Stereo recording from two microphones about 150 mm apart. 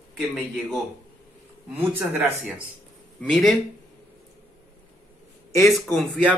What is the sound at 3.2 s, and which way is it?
Speech, centre (ahead or behind).